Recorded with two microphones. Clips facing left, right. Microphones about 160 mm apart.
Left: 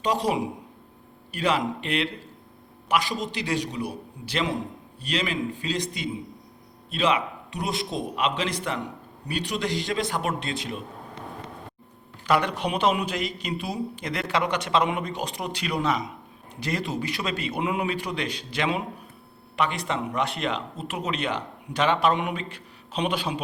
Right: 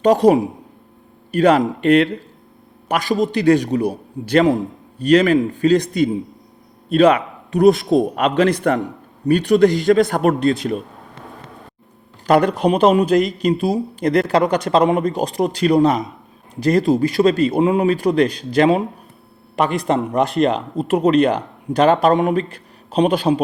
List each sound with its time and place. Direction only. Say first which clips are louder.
0.0 s a man's voice: right 12 dB; 55° right (ahead or behind)
12.2 s a man's voice: right 9 dB; 40° right (ahead or behind)